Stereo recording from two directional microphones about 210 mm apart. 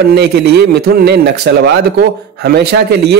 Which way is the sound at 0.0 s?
50° right (ahead or behind).